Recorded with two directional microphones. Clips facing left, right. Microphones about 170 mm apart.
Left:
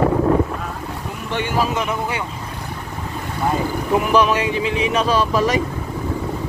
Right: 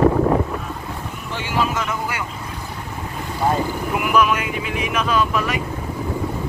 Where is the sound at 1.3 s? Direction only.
55° left (ahead or behind).